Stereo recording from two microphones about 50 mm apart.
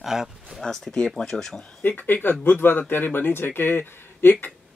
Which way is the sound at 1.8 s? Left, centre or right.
Left.